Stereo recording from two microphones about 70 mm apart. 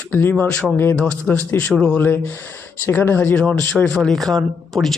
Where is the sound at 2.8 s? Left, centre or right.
Left.